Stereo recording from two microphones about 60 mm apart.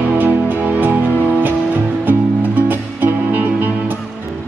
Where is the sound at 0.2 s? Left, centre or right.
Right.